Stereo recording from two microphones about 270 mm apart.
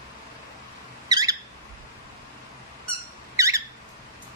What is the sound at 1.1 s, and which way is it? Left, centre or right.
Bird, centre.